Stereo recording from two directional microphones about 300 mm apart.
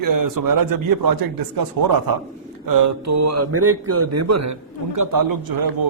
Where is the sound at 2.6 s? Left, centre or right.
Right.